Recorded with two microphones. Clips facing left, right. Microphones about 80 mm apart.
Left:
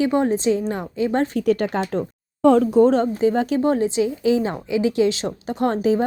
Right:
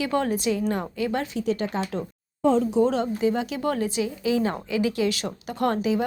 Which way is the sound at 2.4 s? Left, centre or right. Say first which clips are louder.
Left 6 dB; left.